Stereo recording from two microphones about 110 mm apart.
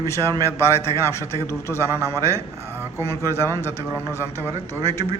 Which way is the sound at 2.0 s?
20° right (ahead or behind).